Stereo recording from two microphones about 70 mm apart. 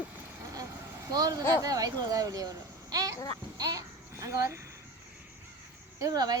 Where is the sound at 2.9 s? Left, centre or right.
Right.